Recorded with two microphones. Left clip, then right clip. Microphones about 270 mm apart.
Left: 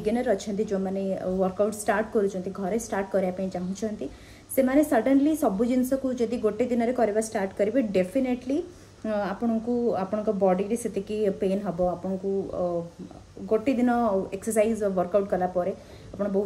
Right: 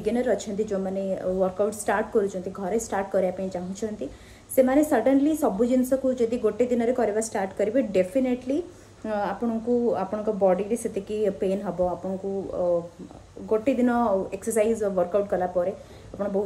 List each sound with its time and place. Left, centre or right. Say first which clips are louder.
0.0 s a woman's voice: right 1 dB; centre
13.5 s a woman's voice: right 1 dB; centre